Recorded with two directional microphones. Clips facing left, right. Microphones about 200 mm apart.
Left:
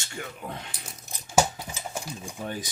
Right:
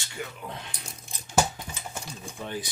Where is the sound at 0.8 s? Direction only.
5° left (ahead or behind).